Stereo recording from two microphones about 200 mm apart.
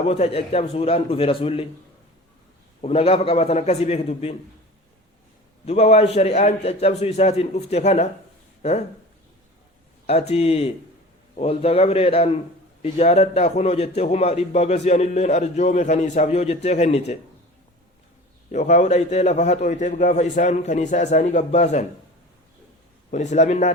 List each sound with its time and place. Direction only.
0.1 s a man's voice: 30° left (ahead or behind)
2.8 s a man's voice: 30° left (ahead or behind)
5.6 s a man's voice: 30° left (ahead or behind)
10.1 s a man's voice: 30° left (ahead or behind)
18.5 s a man's voice: 35° left (ahead or behind)
23.1 s a man's voice: 35° left (ahead or behind)